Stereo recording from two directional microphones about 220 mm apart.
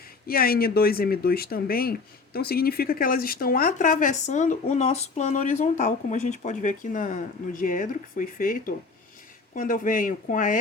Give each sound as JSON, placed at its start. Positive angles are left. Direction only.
{"t": 0.3, "sound": "speech", "side_deg": 45}